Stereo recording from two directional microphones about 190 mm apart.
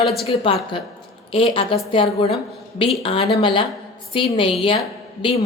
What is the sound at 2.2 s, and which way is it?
A woman's voice, 30° left (ahead or behind).